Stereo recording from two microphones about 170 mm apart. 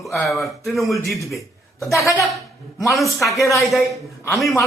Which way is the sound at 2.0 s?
15° left (ahead or behind).